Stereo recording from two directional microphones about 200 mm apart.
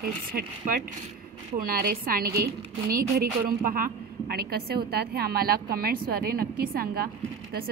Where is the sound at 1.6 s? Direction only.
45° right (ahead or behind).